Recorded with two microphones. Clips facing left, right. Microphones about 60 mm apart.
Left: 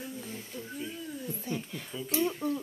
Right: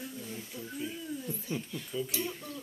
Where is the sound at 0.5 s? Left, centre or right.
Centre.